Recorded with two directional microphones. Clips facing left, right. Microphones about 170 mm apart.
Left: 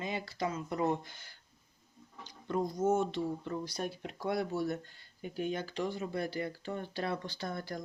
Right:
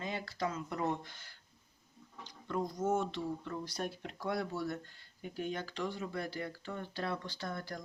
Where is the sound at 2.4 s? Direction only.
25° left (ahead or behind).